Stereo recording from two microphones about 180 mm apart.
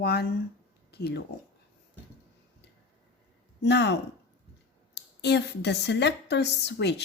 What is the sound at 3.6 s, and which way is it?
A woman's voice, 70° left (ahead or behind).